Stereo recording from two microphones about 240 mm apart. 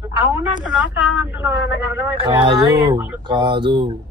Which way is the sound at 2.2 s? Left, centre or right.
Centre.